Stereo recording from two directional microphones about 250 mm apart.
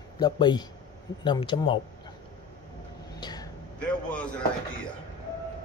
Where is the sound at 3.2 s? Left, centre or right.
Centre.